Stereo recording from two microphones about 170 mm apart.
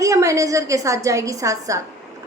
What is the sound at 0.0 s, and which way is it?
A woman's voice, 20° right (ahead or behind).